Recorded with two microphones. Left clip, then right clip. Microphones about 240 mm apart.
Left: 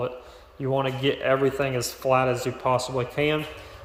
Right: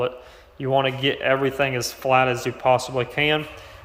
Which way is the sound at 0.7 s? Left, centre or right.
Right.